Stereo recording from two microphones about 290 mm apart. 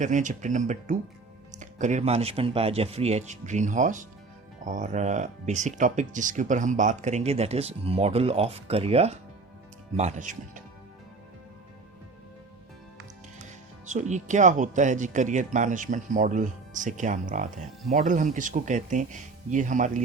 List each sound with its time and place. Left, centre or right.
0.0 s speech: right
13.8 s speech: right